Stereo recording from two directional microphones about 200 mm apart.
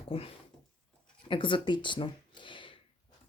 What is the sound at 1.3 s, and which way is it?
Speech, 25° left (ahead or behind).